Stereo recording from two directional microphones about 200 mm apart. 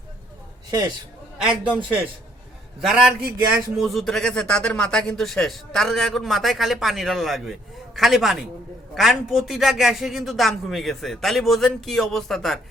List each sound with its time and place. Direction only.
0.7 s a man's voice: 20° right (ahead or behind)
2.8 s a man's voice: centre (ahead or behind)